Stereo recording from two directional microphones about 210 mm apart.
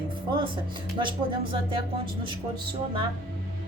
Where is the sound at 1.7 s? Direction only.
25° right (ahead or behind).